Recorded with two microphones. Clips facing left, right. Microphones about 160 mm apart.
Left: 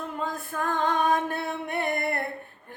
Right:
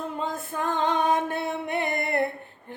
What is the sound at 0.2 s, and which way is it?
Female singing, 20° right (ahead or behind).